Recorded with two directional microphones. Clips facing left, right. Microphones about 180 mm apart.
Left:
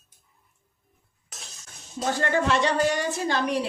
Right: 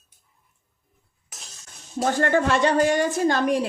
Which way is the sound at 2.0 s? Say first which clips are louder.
Right 4 dB; 55° right (ahead or behind).